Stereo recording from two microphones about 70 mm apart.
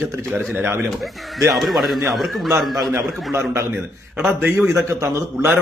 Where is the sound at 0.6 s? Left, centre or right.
Right.